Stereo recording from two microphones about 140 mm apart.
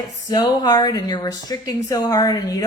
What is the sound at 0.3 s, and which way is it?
Speech, 30° left (ahead or behind).